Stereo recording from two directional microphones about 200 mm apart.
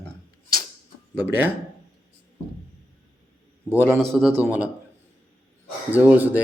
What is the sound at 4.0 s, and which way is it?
Speech, centre (ahead or behind).